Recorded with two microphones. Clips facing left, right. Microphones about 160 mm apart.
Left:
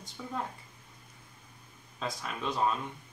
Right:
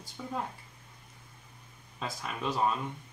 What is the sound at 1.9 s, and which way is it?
Speech, 5° right (ahead or behind).